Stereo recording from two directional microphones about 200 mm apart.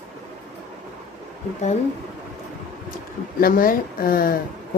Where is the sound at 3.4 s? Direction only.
45° left (ahead or behind).